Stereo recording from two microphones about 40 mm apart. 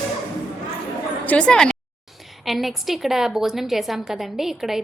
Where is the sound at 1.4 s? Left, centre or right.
Centre.